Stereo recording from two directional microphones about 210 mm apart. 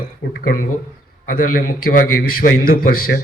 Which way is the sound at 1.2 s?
40° left (ahead or behind).